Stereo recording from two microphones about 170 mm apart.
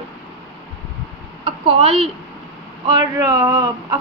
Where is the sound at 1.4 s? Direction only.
30° right (ahead or behind).